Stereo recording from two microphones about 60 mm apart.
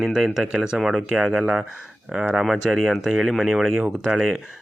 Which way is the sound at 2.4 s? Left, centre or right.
Centre.